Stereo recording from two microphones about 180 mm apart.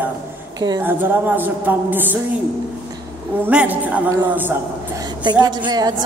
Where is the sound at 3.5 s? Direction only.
5° right (ahead or behind).